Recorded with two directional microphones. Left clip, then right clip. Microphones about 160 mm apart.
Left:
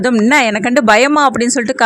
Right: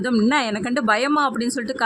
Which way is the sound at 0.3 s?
30° left (ahead or behind).